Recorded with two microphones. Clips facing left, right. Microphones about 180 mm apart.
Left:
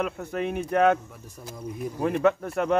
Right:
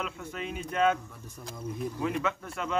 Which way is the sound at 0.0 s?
50° left (ahead or behind).